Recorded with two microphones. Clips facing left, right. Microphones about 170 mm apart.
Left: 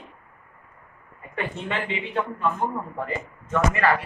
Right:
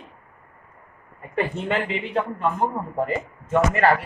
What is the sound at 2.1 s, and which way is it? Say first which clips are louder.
A man's voice: right 1 dB; 25° right (ahead or behind).